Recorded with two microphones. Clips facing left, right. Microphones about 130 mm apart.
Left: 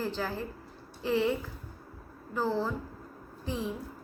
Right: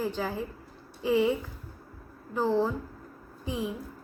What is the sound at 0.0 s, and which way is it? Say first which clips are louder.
A woman's voice: right 2 dB; 15° right (ahead or behind).